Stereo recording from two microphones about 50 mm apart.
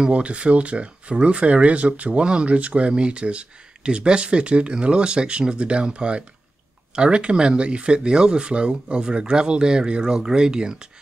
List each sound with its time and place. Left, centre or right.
0.0 s speech: right